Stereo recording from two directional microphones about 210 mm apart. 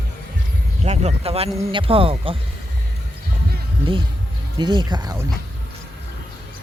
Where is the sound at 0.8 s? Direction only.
30° right (ahead or behind).